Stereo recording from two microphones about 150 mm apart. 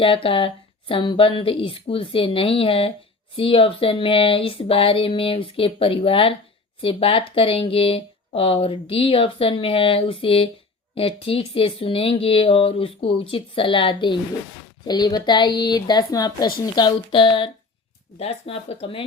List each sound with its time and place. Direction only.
0.0 s a woman's voice: 35° left (ahead or behind)